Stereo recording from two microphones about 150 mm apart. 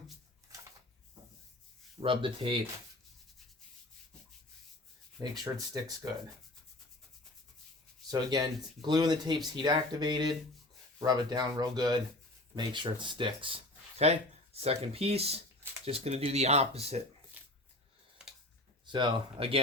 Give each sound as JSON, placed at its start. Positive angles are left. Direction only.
{"t": 2.0, "sound": "speech", "side_deg": -35}
{"t": 5.4, "sound": "speech", "side_deg": -25}
{"t": 8.1, "sound": "speech", "side_deg": -25}
{"t": 17.4, "sound": "a sound", "side_deg": -10}
{"t": 18.9, "sound": "speech", "side_deg": -30}